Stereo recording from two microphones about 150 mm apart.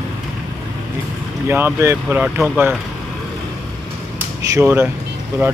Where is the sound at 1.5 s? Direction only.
15° right (ahead or behind).